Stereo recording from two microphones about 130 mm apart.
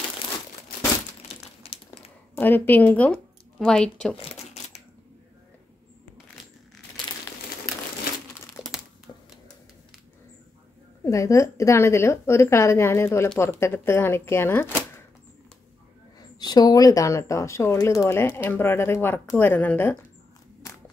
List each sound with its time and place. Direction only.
1.3 s crumpling: 45° left (ahead or behind)
2.3 s a woman's voice: 15° left (ahead or behind)
4.2 s a sound: 55° left (ahead or behind)
8.6 s crumpling: 25° left (ahead or behind)
11.1 s speech: 25° left (ahead or behind)
16.3 s speech: 30° left (ahead or behind); by 20.0 s 15° left (ahead or behind)